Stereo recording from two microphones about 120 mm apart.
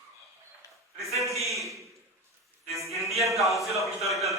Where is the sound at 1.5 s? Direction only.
25° right (ahead or behind).